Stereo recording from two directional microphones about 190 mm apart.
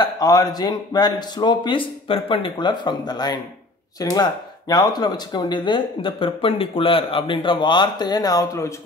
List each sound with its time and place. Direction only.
0.0 s speech: 20° left (ahead or behind)